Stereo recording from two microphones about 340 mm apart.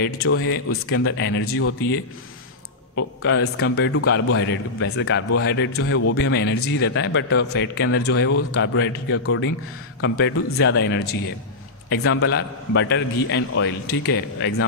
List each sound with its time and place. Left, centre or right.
0.0 s a man's voice: left
3.0 s a man's voice: left